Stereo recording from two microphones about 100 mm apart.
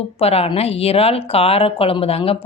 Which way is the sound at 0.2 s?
80° left.